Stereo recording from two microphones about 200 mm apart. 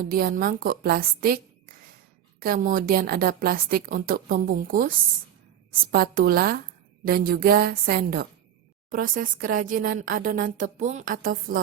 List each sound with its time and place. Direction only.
0.0 s speech: 45° right (ahead or behind)